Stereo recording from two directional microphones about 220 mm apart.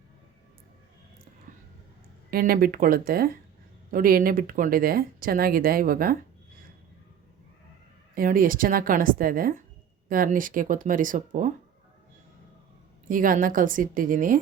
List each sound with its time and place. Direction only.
2.3 s speech: 40° right (ahead or behind)
8.1 s speech: 40° right (ahead or behind)
13.1 s speech: 40° right (ahead or behind)